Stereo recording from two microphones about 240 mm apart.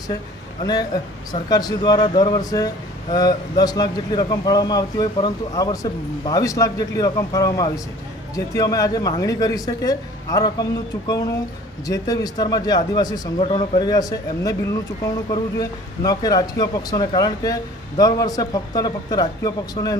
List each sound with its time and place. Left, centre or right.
0.6 s a man's voice: centre
11.9 s a man's voice: centre
16.0 s a man's voice: centre